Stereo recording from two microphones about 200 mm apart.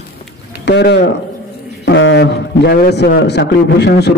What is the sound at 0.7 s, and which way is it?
Speech, 55° left (ahead or behind).